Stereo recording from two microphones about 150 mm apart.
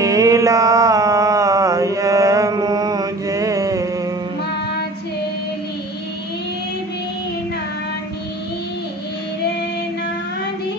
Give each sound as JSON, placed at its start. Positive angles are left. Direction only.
{"t": 0.0, "sound": "mantra", "side_deg": -20}